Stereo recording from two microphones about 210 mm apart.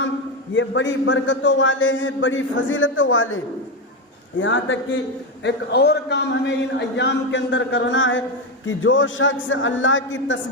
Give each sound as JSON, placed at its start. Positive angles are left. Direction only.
{"t": 0.5, "sound": "a man's voice", "side_deg": 60}